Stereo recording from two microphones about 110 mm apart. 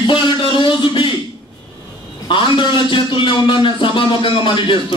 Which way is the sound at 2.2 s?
50° left (ahead or behind).